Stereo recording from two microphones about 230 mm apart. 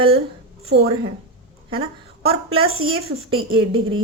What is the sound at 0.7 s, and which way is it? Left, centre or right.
Speech, right.